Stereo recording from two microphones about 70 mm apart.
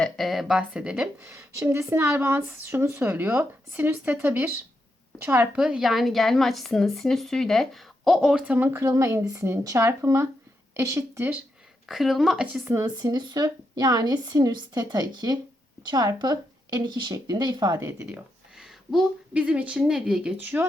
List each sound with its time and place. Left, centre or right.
0.0 s speech: centre
0.7 s speech: centre
1.0 s a woman's voice: right
5.5 s speech: centre
8.5 s speech: right
11.9 s speech: centre
12.8 s a woman's voice: right
15.8 s speech: right
16.2 s a woman's voice: right
18.5 s a sound: centre
19.3 s speech: centre
20.4 s speech: right